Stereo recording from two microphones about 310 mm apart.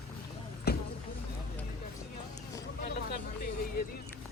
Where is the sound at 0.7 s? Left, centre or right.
Left.